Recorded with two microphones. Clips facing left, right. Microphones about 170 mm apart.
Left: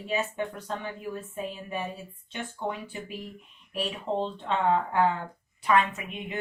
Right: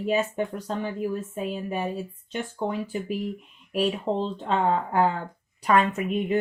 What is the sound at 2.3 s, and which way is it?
Speech, 40° right (ahead or behind).